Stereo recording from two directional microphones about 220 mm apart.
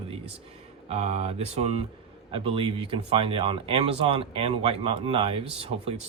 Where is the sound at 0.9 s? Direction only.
30° right (ahead or behind).